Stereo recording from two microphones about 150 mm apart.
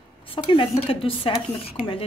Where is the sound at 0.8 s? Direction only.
35° left (ahead or behind).